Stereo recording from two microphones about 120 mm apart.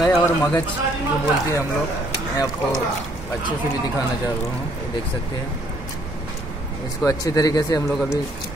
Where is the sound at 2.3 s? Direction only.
30° left (ahead or behind).